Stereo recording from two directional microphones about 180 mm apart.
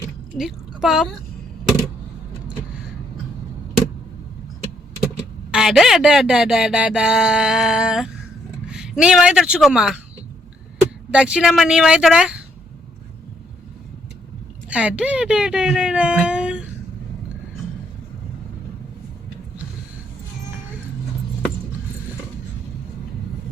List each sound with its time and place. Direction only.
0.3 s speech: centre (ahead or behind)
5.5 s speech: 5° right (ahead or behind)
11.1 s speech: 5° right (ahead or behind)
14.7 s speech: 5° right (ahead or behind)